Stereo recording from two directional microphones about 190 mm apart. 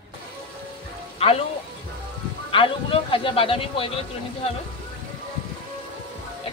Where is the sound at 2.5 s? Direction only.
30° left (ahead or behind).